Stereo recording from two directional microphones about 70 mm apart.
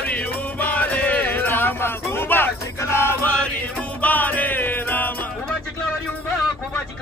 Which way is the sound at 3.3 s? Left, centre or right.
Centre.